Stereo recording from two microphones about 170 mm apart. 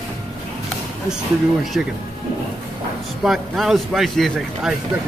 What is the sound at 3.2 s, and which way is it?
Speech, centre (ahead or behind).